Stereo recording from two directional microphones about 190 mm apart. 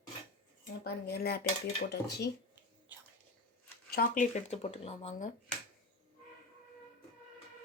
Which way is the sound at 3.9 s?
50° left (ahead or behind).